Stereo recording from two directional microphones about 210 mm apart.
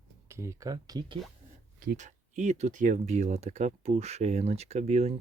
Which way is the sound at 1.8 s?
40° right (ahead or behind).